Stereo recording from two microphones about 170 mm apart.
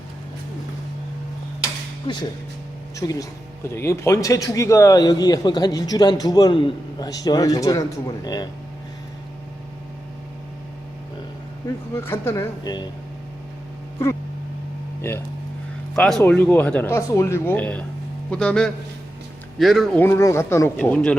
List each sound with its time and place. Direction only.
2.9 s speech: 20° left (ahead or behind)
11.9 s speech: 15° left (ahead or behind)
15.1 s speech: 10° left (ahead or behind)
16.0 s a man's voice: centre (ahead or behind)
20.0 s speech: 15° left (ahead or behind)